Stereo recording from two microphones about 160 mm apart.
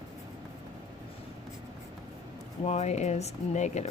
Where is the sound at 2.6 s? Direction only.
45° left (ahead or behind).